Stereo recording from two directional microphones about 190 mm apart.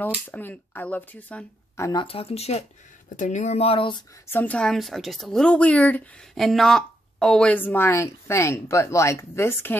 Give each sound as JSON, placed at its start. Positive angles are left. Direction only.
{"t": 0.3, "sound": "a woman's voice", "side_deg": 10}
{"t": 1.9, "sound": "speech", "side_deg": 25}
{"t": 4.3, "sound": "a woman's voice", "side_deg": 10}